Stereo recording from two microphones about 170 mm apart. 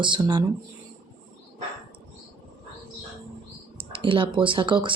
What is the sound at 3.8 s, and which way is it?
Speech, 30° right (ahead or behind).